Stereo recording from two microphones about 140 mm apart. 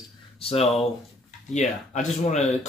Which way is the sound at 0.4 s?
45° left (ahead or behind).